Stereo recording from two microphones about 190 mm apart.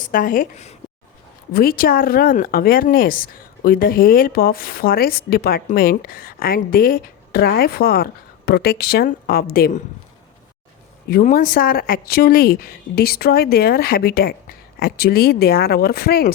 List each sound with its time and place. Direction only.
0.0 s speech: 45° left (ahead or behind)
1.5 s a woman's voice: 50° left (ahead or behind)
11.1 s a woman's voice: 45° left (ahead or behind)